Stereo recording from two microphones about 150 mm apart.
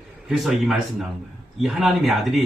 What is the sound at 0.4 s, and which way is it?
A man's voice, centre (ahead or behind).